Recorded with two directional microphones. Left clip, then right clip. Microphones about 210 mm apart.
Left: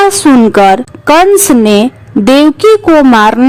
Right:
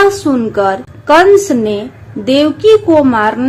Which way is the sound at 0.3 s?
55° left (ahead or behind).